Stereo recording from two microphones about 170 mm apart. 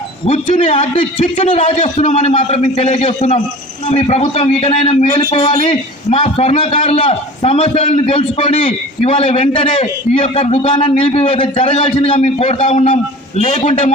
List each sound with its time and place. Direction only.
0.3 s speech: 40° left (ahead or behind)